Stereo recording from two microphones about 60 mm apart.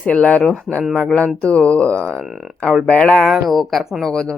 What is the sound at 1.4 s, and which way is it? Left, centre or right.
Speech, centre.